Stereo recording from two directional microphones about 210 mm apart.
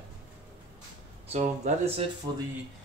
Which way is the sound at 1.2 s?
30° right (ahead or behind).